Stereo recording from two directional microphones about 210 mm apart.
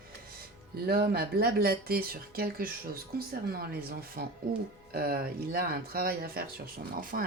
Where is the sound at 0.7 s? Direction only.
45° right (ahead or behind).